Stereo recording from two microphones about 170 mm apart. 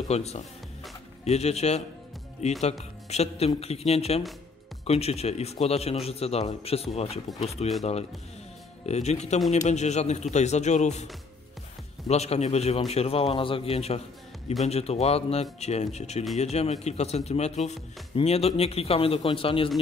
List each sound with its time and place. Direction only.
0.1 s speech: 40° left (ahead or behind)
8.8 s speech: 40° left (ahead or behind)
12.1 s speech: 40° left (ahead or behind)